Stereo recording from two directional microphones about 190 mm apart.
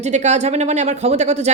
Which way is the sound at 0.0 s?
35° right (ahead or behind).